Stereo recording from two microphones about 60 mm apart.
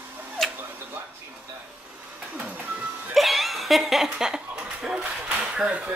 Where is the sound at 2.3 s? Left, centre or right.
Right.